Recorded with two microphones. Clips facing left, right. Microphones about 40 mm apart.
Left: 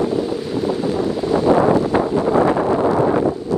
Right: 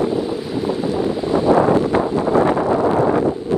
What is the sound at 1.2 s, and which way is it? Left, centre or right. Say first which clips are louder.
Wind noise: left 1 dB; right.